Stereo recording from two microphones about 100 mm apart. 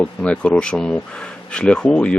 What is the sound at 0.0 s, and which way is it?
Speech, 10° left (ahead or behind).